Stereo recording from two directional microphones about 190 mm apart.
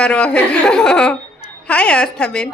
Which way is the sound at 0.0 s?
5° left (ahead or behind).